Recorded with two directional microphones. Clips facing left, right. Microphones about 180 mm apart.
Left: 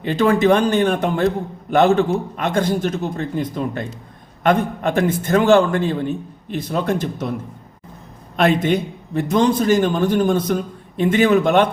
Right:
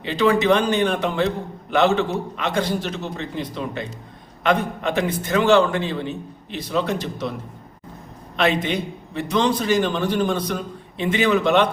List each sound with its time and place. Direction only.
0.0 s a man's voice: 50° left (ahead or behind)
8.4 s a man's voice: 50° left (ahead or behind)